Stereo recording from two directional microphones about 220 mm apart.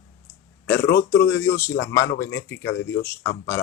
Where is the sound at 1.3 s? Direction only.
10° left (ahead or behind).